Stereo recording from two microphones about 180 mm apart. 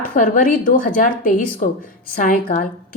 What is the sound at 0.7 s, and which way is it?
A woman's voice, 50° left (ahead or behind).